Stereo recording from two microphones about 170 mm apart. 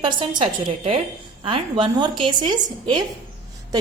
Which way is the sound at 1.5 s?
30° right (ahead or behind).